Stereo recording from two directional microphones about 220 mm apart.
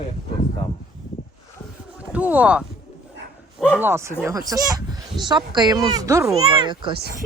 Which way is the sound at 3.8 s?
10° right (ahead or behind).